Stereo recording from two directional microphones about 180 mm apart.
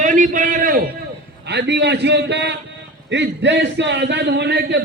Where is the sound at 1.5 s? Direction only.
70° right (ahead or behind).